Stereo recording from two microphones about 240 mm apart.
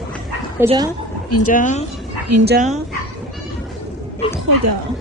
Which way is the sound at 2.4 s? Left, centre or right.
Right.